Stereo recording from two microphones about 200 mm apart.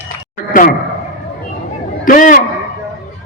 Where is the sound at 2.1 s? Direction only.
40° left (ahead or behind).